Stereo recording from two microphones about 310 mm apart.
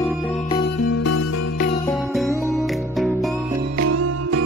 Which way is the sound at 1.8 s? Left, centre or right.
Centre.